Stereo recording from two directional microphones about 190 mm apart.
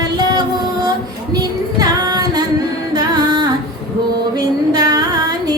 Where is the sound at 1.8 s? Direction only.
20° right (ahead or behind).